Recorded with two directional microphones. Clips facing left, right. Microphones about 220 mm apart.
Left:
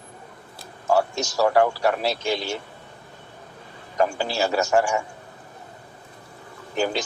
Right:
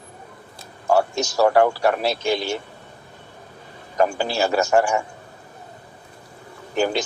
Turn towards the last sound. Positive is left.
turn(degrees=-55)  # may be behind; listen again after turning